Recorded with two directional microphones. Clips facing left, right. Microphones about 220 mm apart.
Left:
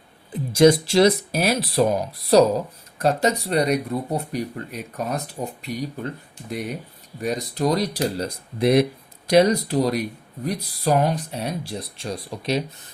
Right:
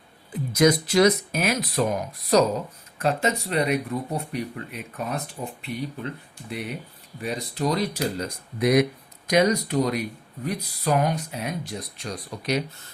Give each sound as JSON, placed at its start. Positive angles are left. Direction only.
{"t": 0.5, "sound": "speech", "side_deg": 30}